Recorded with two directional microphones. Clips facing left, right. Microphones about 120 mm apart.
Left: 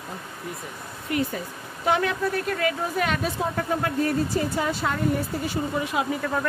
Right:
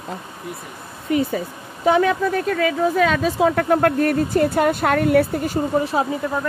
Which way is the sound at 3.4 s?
75° right (ahead or behind).